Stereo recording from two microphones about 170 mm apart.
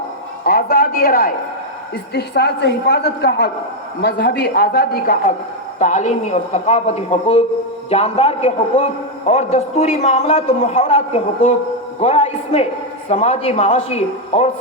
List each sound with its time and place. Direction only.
0.4 s a sound: 60° left (ahead or behind)
2.1 s a man's voice: 75° left (ahead or behind)
5.8 s a man's voice: 45° left (ahead or behind)